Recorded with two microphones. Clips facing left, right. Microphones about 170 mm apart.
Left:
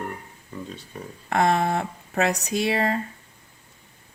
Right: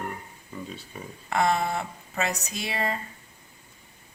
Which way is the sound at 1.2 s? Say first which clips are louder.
Left 3 dB; 55° left (ahead or behind).